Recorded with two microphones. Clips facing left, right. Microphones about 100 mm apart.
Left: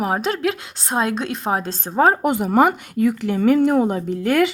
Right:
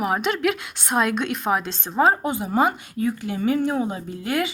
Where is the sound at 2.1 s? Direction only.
70° left (ahead or behind).